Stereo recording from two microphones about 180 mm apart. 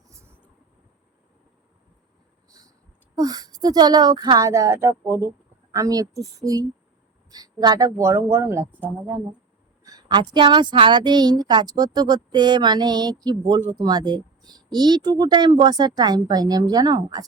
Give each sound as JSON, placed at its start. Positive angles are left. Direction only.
{"t": 0.1, "sound": "vehicle", "side_deg": -15}
{"t": 2.5, "sound": "a sound", "side_deg": -20}
{"t": 3.2, "sound": "a woman's voice", "side_deg": -20}
{"t": 9.8, "sound": "a woman's voice", "side_deg": -20}